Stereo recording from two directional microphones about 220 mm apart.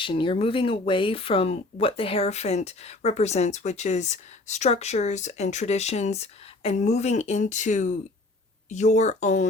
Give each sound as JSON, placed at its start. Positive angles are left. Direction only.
{"t": 0.0, "sound": "speech", "side_deg": 25}